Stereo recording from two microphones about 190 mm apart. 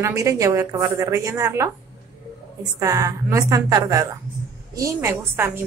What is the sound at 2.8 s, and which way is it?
A woman's voice, 15° right (ahead or behind).